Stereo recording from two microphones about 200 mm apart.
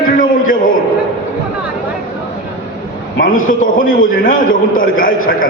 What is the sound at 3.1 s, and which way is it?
A man's voice, 45° left (ahead or behind).